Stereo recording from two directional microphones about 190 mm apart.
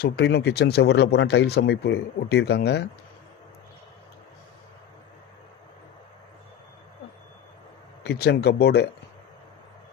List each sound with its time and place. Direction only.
0.0 s speech: 60° left (ahead or behind)
8.0 s speech: 60° left (ahead or behind)